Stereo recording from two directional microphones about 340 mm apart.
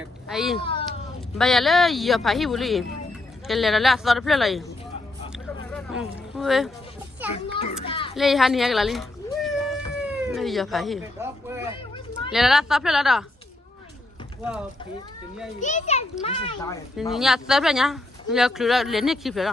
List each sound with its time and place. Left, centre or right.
0.0 s speech: centre
0.6 s cat: centre
1.4 s speech: centre
5.7 s speech: centre
7.3 s children playing: centre
8.1 s cat: centre
12.3 s speech: centre
15.6 s a child's voice: centre
17.0 s speech: centre